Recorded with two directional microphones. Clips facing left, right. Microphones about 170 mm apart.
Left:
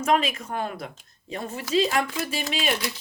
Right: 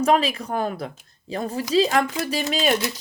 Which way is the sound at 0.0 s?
35° right (ahead or behind).